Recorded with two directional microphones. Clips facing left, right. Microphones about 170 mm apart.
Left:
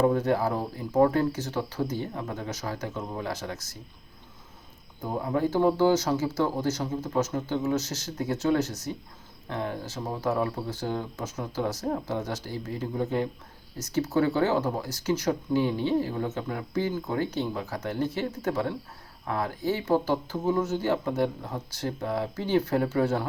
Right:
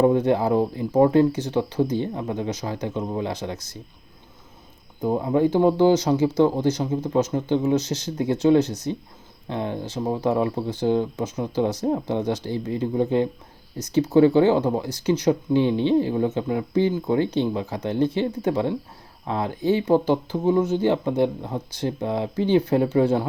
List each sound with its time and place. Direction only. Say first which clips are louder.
0.0 s speech: right 5 dB; 20° right (ahead or behind)
5.0 s speech: right 7 dB; 20° right (ahead or behind)